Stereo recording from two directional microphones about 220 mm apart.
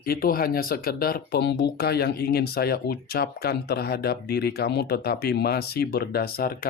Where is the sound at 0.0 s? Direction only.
40° left (ahead or behind).